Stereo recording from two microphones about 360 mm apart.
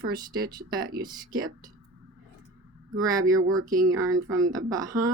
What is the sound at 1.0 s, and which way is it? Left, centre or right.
Speech, centre.